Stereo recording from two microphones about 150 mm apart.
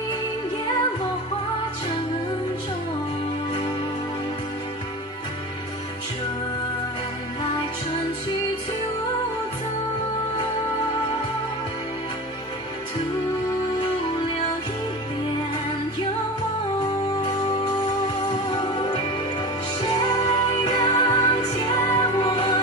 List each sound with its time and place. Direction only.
17.2 s music: 30° left (ahead or behind)
20.0 s music: 30° left (ahead or behind)